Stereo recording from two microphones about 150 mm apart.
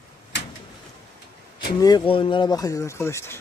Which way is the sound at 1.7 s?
25° left (ahead or behind).